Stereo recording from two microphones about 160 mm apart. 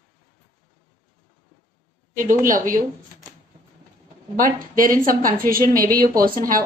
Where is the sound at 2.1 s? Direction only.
55° right (ahead or behind).